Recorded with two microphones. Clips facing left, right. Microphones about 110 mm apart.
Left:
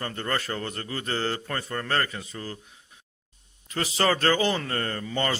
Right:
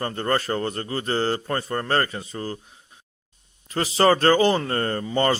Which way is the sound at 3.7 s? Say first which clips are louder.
Right 6 dB; 35° right (ahead or behind).